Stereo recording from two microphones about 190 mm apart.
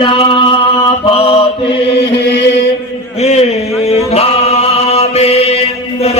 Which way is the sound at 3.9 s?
35° left (ahead or behind).